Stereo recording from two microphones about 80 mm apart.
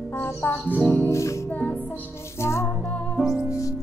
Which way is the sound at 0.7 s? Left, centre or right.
Centre.